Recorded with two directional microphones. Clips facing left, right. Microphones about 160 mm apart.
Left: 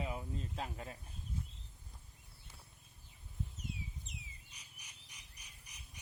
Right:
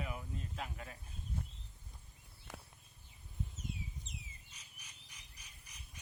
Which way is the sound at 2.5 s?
90° right.